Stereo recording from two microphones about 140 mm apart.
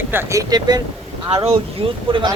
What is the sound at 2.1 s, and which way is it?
Speech, 35° right (ahead or behind).